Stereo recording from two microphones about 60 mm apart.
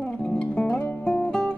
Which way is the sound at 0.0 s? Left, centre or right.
Centre.